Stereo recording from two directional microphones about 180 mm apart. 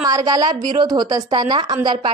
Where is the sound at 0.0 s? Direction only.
20° right (ahead or behind).